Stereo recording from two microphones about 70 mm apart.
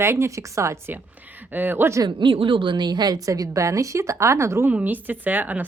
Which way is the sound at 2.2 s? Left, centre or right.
Right.